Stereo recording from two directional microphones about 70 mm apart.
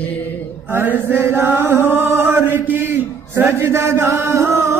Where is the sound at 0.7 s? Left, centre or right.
Right.